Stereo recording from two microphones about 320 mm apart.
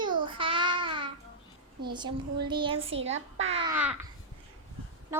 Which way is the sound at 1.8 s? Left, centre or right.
Centre.